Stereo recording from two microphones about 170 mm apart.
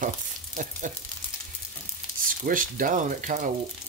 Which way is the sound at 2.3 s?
55° right (ahead or behind).